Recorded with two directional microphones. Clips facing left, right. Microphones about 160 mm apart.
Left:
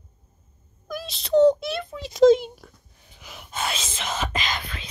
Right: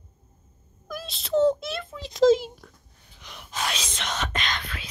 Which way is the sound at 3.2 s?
5° left (ahead or behind).